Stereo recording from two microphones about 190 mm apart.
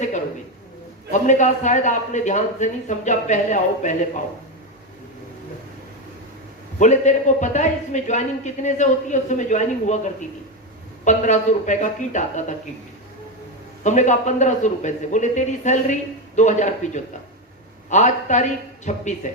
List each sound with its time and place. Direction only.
1.1 s a man's voice: 40° left (ahead or behind)
6.7 s a man's voice: 40° left (ahead or behind)
13.8 s a man's voice: 40° left (ahead or behind)